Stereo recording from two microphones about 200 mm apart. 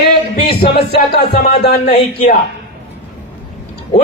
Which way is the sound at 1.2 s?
55° left (ahead or behind).